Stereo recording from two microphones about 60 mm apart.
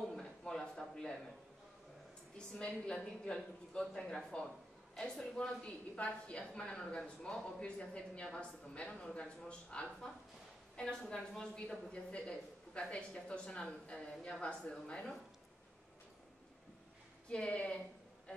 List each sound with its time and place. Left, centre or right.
0.1 s a sound: centre
2.3 s speech: centre
17.3 s speech: centre